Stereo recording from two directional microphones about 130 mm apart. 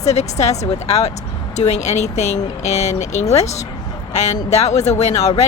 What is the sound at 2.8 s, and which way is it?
Speech, 55° left (ahead or behind).